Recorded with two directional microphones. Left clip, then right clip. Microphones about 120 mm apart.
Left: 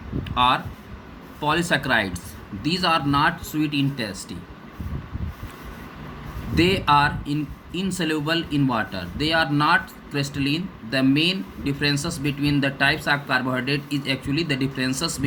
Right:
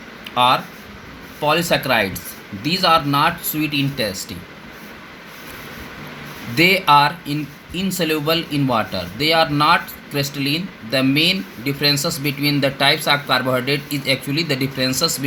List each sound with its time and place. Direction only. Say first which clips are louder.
0.3 s speech: right 4 dB; 40° right (ahead or behind)
6.6 s speech: right 5 dB; 40° right (ahead or behind)